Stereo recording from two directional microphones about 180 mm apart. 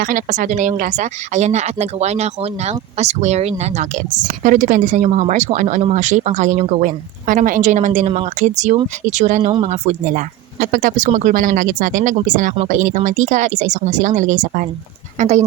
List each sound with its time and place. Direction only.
0.0 s speech: 50° right (ahead or behind)